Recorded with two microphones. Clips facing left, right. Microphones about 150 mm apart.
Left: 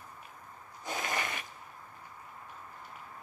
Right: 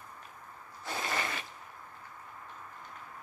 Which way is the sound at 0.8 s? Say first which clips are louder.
Even; 20° left (ahead or behind).